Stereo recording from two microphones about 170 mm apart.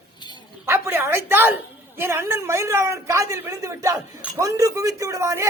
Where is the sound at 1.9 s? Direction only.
15° right (ahead or behind).